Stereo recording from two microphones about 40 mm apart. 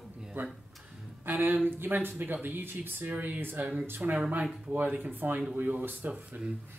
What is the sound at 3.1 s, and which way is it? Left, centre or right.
Speech, right.